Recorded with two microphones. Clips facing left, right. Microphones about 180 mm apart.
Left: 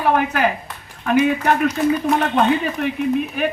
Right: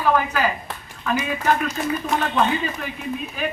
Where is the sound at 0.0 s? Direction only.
60° left (ahead or behind).